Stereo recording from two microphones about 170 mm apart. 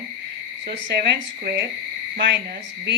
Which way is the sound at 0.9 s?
70° right (ahead or behind).